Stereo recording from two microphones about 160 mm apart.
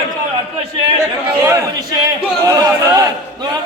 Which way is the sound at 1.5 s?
15° right (ahead or behind).